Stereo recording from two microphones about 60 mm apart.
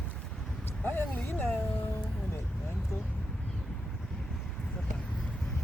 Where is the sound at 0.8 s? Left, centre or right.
Left.